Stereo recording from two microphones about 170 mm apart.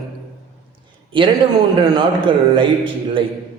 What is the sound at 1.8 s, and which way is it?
A woman's voice, 25° right (ahead or behind).